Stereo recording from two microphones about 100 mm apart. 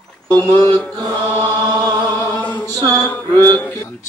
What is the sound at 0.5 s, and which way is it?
Mantra, 50° right (ahead or behind).